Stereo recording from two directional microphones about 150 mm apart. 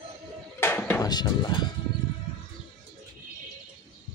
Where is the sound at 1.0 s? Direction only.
25° left (ahead or behind).